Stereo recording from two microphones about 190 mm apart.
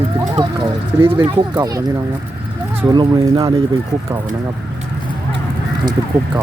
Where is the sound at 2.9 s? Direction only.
20° right (ahead or behind).